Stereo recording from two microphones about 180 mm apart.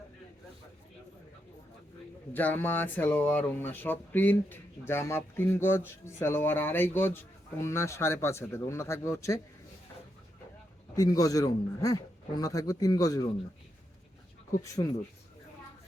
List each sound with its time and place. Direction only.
2.3 s speech: 10° left (ahead or behind)
10.9 s a man's voice: 20° left (ahead or behind)